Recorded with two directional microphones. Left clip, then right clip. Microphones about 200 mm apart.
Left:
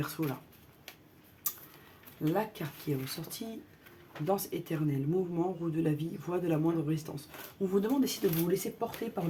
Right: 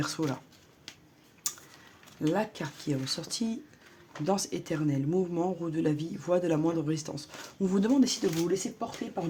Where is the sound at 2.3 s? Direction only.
40° right (ahead or behind).